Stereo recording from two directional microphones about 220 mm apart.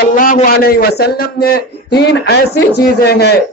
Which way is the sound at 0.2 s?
40° left (ahead or behind).